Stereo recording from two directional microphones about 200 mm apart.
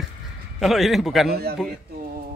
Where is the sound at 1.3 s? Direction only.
50° right (ahead or behind).